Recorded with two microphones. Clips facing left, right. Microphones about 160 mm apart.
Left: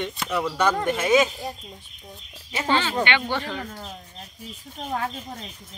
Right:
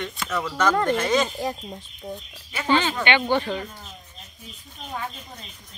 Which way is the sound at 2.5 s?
20° left (ahead or behind).